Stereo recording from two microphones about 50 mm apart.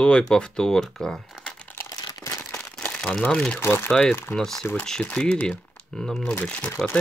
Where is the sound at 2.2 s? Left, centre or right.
Left.